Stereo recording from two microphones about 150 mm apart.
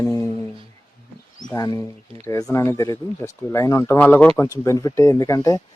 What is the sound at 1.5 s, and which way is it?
Speech, 25° left (ahead or behind).